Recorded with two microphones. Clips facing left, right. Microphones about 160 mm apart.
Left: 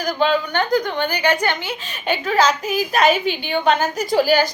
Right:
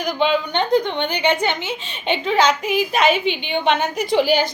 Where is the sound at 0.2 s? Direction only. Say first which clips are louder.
Even; 20° right (ahead or behind).